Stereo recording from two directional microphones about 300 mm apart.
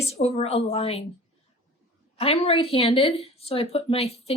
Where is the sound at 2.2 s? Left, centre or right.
Centre.